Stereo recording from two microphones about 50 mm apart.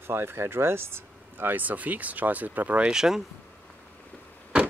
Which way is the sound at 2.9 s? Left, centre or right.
Centre.